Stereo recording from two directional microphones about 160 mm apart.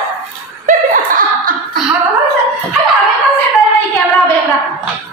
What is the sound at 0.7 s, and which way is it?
Chuckle, 60° right (ahead or behind).